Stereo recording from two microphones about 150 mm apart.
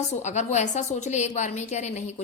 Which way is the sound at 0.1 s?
50° left (ahead or behind).